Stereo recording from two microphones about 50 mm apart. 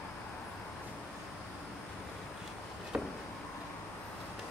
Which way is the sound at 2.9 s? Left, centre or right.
Centre.